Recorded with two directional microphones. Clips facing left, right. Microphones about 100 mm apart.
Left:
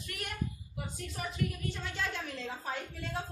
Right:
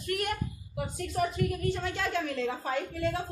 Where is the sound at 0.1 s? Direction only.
60° right (ahead or behind).